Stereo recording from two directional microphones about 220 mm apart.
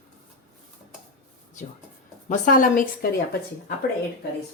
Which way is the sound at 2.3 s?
35° left (ahead or behind).